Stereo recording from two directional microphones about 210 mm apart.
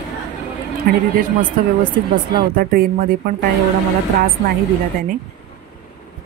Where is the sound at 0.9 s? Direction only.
45° right (ahead or behind).